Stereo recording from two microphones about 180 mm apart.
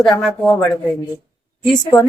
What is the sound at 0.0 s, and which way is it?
Speech, centre (ahead or behind).